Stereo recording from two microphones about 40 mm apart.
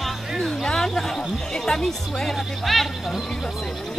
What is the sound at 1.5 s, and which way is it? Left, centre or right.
Speech, centre.